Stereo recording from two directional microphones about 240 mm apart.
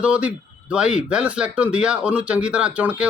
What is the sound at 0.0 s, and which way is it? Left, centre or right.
Speech, centre.